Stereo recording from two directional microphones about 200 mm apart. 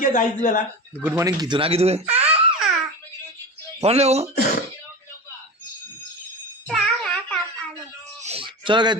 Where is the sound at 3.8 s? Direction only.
30° right (ahead or behind).